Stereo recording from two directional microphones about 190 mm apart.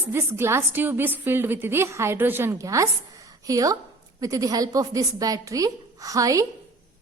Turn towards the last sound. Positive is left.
turn(degrees=-20)  # may be behind; listen again after turning